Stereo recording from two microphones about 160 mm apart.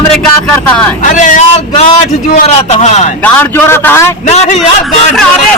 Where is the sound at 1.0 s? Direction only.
50° left (ahead or behind).